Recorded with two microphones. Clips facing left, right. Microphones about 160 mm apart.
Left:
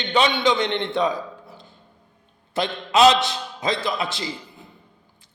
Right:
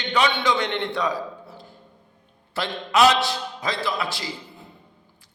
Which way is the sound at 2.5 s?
20° left (ahead or behind).